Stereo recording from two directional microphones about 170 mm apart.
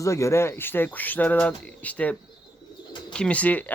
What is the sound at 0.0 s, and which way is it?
Speech, 15° left (ahead or behind).